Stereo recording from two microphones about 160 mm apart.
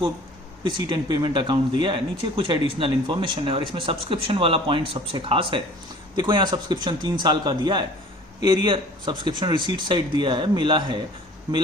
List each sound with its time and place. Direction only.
0.6 s speech: 25° right (ahead or behind)